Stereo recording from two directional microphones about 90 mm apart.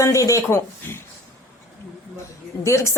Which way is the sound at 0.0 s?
35° left (ahead or behind).